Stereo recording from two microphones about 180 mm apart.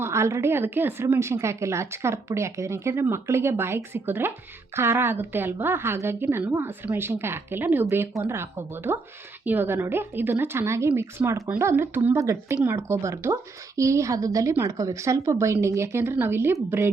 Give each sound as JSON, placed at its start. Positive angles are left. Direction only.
{"t": 0.0, "sound": "a woman's voice", "side_deg": -15}